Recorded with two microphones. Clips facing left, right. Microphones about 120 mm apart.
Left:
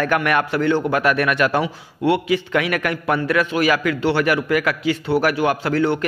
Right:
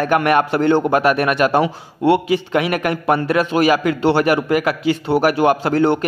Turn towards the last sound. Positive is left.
turn(degrees=-30)  # may be behind; listen again after turning